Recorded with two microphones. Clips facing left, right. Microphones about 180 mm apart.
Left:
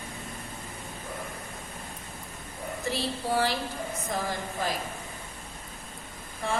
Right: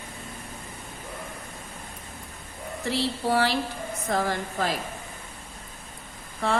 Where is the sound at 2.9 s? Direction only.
70° right (ahead or behind).